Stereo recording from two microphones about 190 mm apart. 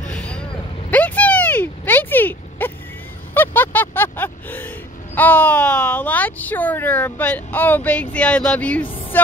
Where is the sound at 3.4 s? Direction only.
10° left (ahead or behind).